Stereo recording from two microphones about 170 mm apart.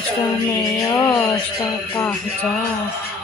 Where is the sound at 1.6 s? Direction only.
10° left (ahead or behind).